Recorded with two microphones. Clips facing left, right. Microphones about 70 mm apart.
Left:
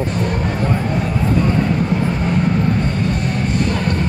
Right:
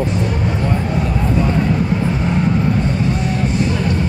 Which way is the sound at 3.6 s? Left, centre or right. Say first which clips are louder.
Right 1 dB; left.